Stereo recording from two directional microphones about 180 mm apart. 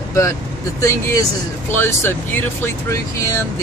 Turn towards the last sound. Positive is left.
turn(degrees=15)  # may be behind; listen again after turning